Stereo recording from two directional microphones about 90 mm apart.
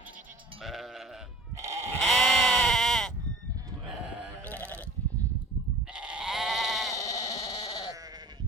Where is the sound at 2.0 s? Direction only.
Centre (ahead or behind).